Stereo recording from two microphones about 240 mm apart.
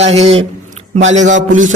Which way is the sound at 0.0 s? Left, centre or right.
Right.